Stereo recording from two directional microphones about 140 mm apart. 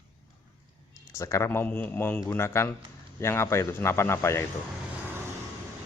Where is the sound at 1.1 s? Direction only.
20° left (ahead or behind).